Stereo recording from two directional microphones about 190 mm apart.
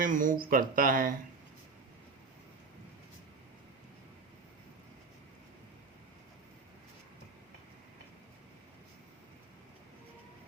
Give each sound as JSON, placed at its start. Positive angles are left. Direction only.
{"t": 0.0, "sound": "speech", "side_deg": -45}